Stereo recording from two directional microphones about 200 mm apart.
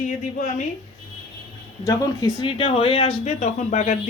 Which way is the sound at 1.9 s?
20° left (ahead or behind).